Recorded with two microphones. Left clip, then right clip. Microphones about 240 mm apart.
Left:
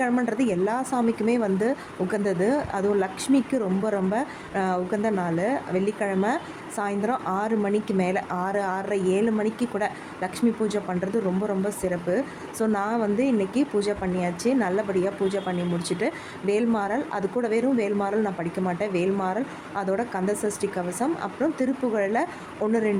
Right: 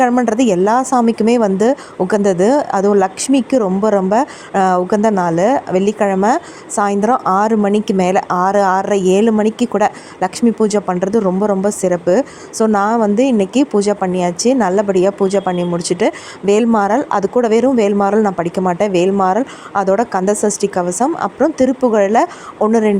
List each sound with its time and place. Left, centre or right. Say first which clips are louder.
0.0 s a woman's voice: right 12 dB; right